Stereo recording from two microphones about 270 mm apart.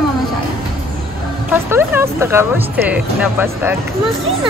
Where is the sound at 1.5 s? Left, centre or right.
Centre.